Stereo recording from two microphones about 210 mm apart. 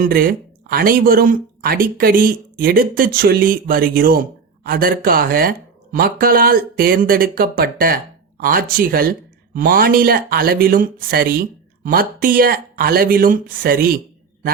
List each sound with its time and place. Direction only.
0.0 s speech: 45° right (ahead or behind)